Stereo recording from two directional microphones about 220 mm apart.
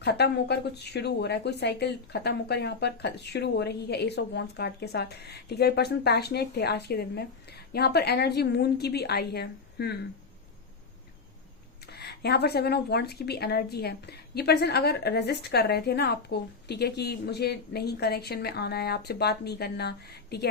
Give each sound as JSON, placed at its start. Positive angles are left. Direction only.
{"t": 0.0, "sound": "speech", "side_deg": 50}
{"t": 11.9, "sound": "speech", "side_deg": 45}